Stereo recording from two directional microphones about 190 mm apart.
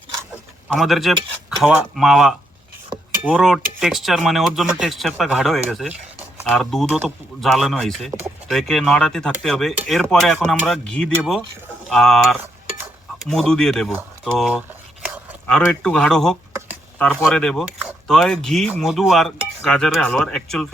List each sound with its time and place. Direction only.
0.7 s cutlery: centre (ahead or behind)
2.9 s cutlery: 20° right (ahead or behind)
3.2 s cutlery: 5° right (ahead or behind)
12.4 s cutlery: 10° right (ahead or behind)
13.1 s cutlery: centre (ahead or behind)
15.0 s a sound: 10° right (ahead or behind)
15.6 s cutlery: 10° left (ahead or behind)